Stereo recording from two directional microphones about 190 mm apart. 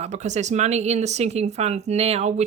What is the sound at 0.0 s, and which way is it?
Speech, 40° right (ahead or behind).